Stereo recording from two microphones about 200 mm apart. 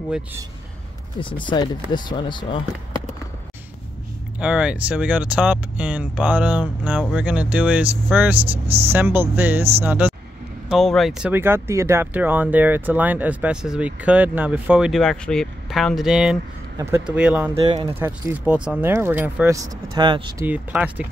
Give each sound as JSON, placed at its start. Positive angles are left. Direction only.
{"t": 0.1, "sound": "speech", "side_deg": -10}
{"t": 1.2, "sound": "speech", "side_deg": 25}
{"t": 4.4, "sound": "speech", "side_deg": -5}
{"t": 8.4, "sound": "speech", "side_deg": -30}
{"t": 8.9, "sound": "speech", "side_deg": -10}
{"t": 17.6, "sound": "speech", "side_deg": -25}
{"t": 17.9, "sound": "speech", "side_deg": -10}
{"t": 20.4, "sound": "speech", "side_deg": -5}